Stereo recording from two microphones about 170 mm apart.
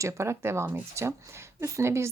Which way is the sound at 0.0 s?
15° right (ahead or behind).